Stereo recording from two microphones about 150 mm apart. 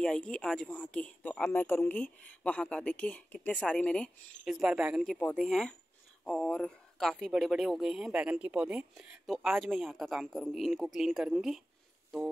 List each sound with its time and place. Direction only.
0.0 s speech: 5° left (ahead or behind)